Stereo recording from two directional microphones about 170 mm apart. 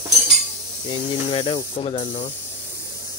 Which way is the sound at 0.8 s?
30° left (ahead or behind).